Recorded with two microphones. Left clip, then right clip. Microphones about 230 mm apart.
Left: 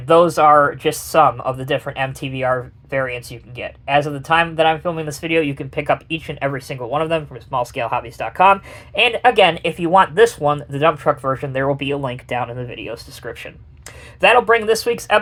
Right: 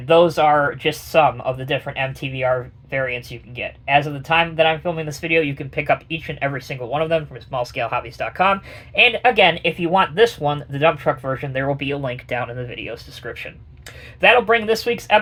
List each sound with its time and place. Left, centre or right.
0.1 s speech: left